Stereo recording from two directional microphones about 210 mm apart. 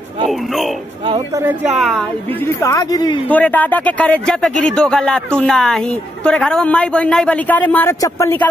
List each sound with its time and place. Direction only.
0.3 s speech: centre (ahead or behind)
2.4 s speech: 15° left (ahead or behind)